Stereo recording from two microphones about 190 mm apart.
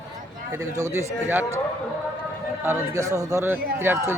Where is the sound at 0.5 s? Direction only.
15° right (ahead or behind).